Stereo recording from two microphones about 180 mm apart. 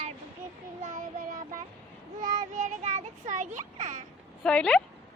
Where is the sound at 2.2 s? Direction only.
40° right (ahead or behind).